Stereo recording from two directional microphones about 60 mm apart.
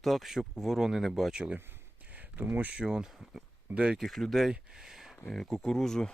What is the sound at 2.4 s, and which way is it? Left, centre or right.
Speech, right.